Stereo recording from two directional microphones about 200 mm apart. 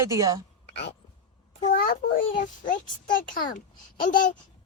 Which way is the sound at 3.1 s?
45° left (ahead or behind).